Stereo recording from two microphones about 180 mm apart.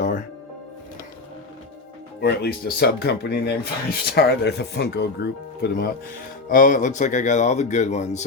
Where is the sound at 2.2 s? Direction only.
60° left (ahead or behind).